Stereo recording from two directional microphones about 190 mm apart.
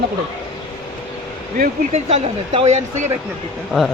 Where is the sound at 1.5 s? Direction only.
35° right (ahead or behind).